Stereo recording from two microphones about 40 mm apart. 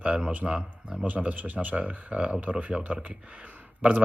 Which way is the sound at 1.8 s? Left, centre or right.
Right.